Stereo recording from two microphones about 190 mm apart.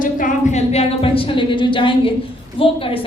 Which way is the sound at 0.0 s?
45° left (ahead or behind).